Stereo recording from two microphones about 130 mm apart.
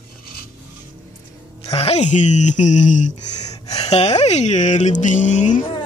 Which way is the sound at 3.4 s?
30° left (ahead or behind).